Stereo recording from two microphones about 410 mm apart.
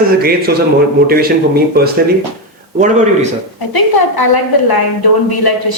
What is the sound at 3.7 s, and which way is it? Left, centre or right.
A woman's voice, left.